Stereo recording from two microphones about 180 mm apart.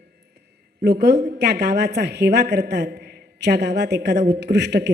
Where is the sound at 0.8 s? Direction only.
65° right (ahead or behind).